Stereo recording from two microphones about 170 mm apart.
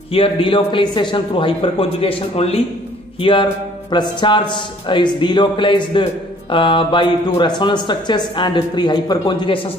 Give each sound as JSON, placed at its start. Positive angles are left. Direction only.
{"t": 0.1, "sound": "speech", "side_deg": 30}